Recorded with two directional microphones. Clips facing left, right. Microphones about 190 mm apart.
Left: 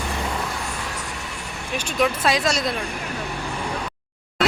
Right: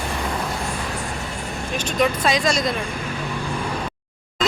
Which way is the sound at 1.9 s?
5° left (ahead or behind).